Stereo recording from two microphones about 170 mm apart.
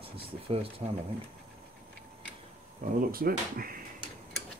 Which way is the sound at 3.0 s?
60° right (ahead or behind).